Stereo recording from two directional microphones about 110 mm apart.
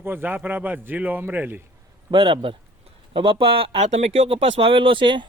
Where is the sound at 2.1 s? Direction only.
45° right (ahead or behind).